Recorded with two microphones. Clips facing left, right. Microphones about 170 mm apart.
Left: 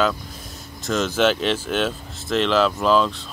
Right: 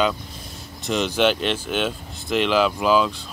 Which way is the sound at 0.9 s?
15° right (ahead or behind).